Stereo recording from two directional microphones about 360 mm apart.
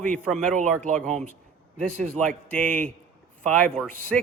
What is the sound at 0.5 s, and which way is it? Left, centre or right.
Speech, right.